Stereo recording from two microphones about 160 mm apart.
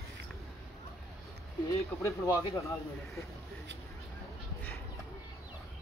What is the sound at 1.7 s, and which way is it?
Speech, 20° left (ahead or behind).